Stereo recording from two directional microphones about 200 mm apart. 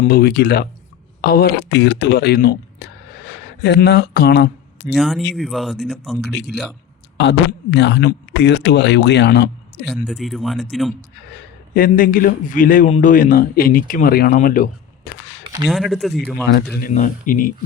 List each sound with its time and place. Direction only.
0.1 s speech: 50° left (ahead or behind)
4.9 s speech: centre (ahead or behind)
6.2 s speech: 55° left (ahead or behind)
10.1 s speech: centre (ahead or behind)
11.7 s speech: 45° left (ahead or behind)
15.6 s speech: centre (ahead or behind)
16.7 s speech: 40° left (ahead or behind)